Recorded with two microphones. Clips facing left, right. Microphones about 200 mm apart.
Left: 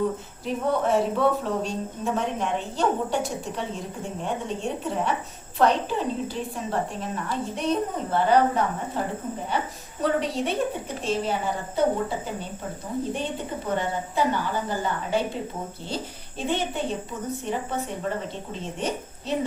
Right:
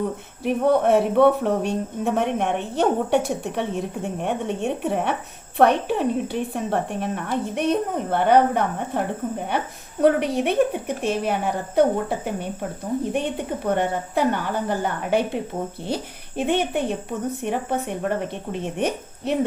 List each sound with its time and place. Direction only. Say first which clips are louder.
0.4 s speech: right 6 dB; 65° right (ahead or behind)
16.4 s speech: right 5 dB; 60° right (ahead or behind)